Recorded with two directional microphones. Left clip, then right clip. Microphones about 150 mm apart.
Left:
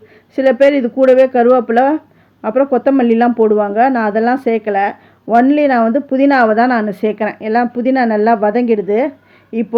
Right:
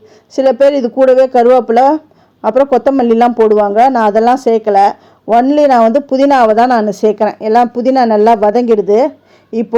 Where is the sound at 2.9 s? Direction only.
25° right (ahead or behind).